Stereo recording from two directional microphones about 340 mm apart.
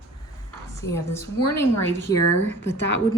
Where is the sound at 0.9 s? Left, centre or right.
Centre.